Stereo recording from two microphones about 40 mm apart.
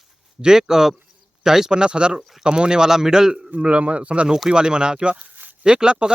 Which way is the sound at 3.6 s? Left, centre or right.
Right.